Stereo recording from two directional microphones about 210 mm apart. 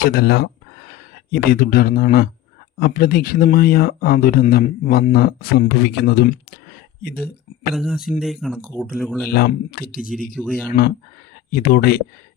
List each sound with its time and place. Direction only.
0.0 s speech: 50° left (ahead or behind)
7.8 s speech: centre (ahead or behind)
9.3 s speech: 45° left (ahead or behind)
10.3 s speech: 5° left (ahead or behind)
11.5 s speech: 45° left (ahead or behind)